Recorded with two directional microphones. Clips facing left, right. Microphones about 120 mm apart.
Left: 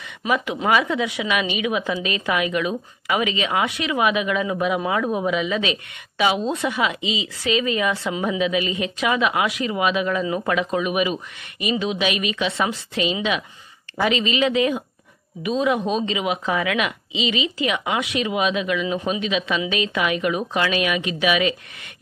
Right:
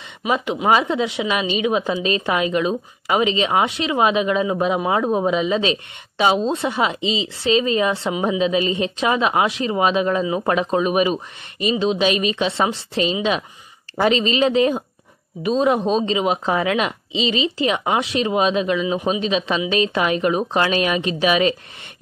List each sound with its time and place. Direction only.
0.2 s speech: 10° right (ahead or behind)
0.7 s a woman's voice: 25° right (ahead or behind)